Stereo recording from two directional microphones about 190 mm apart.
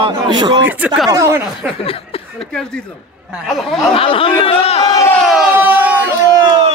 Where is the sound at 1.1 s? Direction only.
15° right (ahead or behind).